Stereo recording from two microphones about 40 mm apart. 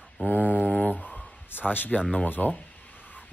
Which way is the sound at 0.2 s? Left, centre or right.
Left.